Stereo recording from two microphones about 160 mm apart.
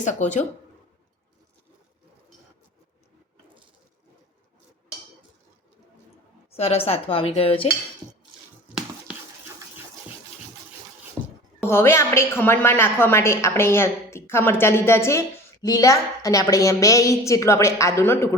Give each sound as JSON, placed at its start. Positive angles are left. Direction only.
{"t": 0.0, "sound": "speech", "side_deg": 50}
{"t": 6.5, "sound": "speech", "side_deg": 40}
{"t": 11.2, "sound": "a sound", "side_deg": -25}
{"t": 11.6, "sound": "a woman's voice", "side_deg": 15}